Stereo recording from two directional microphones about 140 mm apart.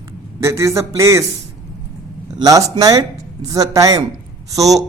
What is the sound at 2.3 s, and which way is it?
Speech, 25° right (ahead or behind).